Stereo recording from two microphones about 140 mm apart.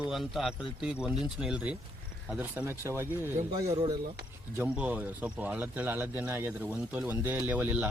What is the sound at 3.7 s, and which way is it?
Speech, 40° right (ahead or behind).